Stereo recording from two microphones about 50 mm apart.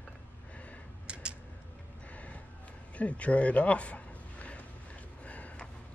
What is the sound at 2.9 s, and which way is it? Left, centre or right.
Speech, left.